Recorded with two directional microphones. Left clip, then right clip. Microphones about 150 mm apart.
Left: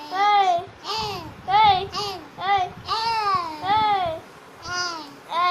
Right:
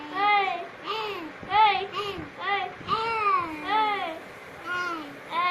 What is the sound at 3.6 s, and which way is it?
Babbling, 45° left (ahead or behind).